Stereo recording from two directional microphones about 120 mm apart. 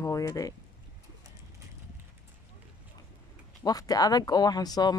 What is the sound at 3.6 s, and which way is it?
Speech, 30° left (ahead or behind).